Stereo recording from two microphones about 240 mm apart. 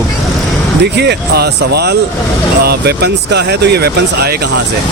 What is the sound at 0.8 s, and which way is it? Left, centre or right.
Speech, right.